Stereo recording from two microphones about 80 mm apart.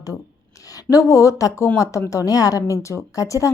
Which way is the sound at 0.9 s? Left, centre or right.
Left.